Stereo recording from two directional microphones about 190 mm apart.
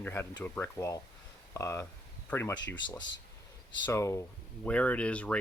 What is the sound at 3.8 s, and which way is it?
Speech, 15° left (ahead or behind).